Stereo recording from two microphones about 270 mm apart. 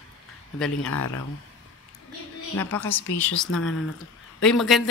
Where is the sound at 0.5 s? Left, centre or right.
Centre.